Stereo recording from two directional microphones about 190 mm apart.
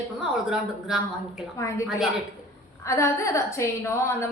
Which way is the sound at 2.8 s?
15° left (ahead or behind).